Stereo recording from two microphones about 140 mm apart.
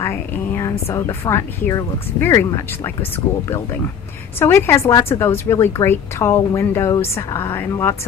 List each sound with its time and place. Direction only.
0.0 s speech: 15° left (ahead or behind)